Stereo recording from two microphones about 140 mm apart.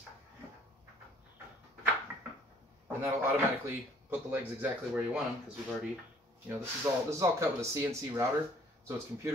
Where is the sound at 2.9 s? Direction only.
15° right (ahead or behind).